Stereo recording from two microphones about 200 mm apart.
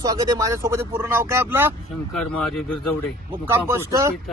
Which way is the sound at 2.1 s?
5° left (ahead or behind).